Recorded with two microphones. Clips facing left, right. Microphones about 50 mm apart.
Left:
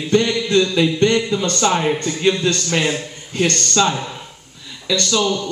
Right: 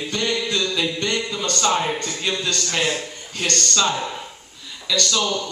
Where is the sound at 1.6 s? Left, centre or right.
Centre.